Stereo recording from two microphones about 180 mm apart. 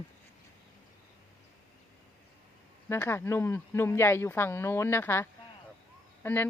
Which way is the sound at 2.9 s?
15° left (ahead or behind).